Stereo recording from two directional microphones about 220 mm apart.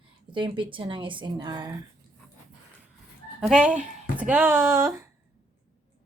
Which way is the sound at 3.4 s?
5° right (ahead or behind).